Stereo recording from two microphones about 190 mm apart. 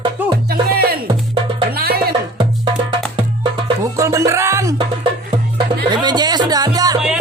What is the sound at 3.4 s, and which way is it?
Music, 20° right (ahead or behind).